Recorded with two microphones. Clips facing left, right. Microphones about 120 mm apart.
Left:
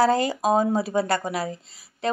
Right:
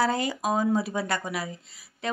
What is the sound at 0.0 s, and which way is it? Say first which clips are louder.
A woman's voice: left 5 dB; 35° left (ahead or behind).